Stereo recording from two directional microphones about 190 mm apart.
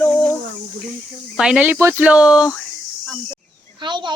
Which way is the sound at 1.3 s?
5° right (ahead or behind).